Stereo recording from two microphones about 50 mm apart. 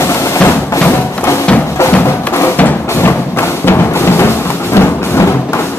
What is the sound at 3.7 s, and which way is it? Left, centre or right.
Music, left.